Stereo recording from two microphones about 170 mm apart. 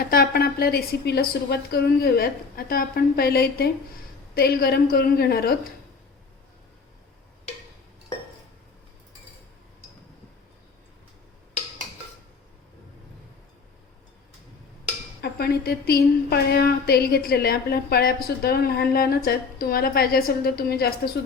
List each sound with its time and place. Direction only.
0.0 s a woman's voice: 60° left (ahead or behind)
15.2 s a woman's voice: 70° left (ahead or behind)